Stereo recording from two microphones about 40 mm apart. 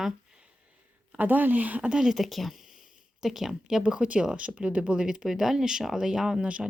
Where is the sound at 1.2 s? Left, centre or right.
Right.